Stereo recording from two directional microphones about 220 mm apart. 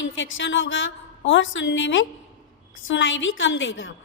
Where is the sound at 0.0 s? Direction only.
60° left (ahead or behind).